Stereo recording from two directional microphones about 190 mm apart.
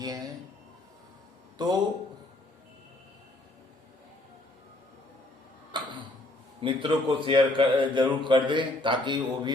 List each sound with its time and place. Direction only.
0.0 s speech: 20° right (ahead or behind)
1.6 s a man's voice: 20° right (ahead or behind)
5.7 s tick-tock: 25° right (ahead or behind)
6.6 s a man's voice: 25° right (ahead or behind)